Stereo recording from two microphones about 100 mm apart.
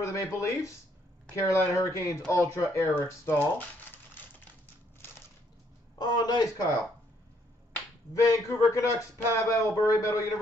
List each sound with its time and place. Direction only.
0.0 s speech: 30° left (ahead or behind)
5.9 s a man's voice: 45° left (ahead or behind)
8.1 s speech: 30° left (ahead or behind)